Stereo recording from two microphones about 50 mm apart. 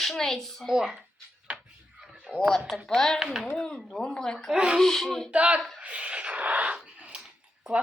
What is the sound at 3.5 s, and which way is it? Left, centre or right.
A child's voice, centre.